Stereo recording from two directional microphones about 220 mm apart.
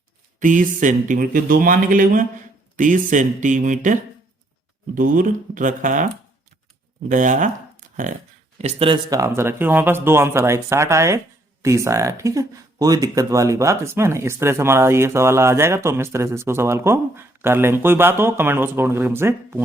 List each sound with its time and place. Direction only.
0.3 s speech: 35° right (ahead or behind)
4.9 s speech: 40° right (ahead or behind)
7.1 s speech: 35° right (ahead or behind); by 19.6 s 10° right (ahead or behind)